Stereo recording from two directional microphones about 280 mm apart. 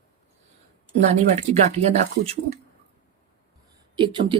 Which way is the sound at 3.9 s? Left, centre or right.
Centre.